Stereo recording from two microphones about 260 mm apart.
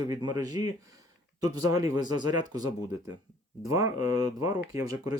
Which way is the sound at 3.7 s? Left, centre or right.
Centre.